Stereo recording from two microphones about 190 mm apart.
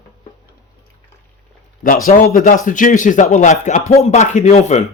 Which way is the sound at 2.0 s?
50° left (ahead or behind).